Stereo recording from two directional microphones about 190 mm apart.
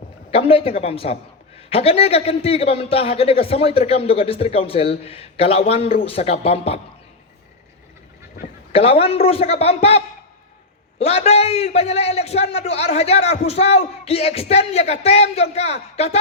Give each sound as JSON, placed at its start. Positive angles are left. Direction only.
{"t": 0.3, "sound": "a man's voice", "side_deg": 30}
{"t": 8.7, "sound": "a man's voice", "side_deg": 30}